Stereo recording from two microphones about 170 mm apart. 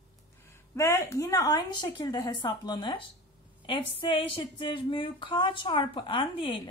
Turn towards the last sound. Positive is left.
turn(degrees=30)  # may be behind; listen again after turning